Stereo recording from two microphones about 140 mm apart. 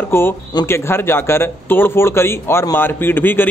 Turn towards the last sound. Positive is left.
turn(degrees=15)  # may be behind; listen again after turning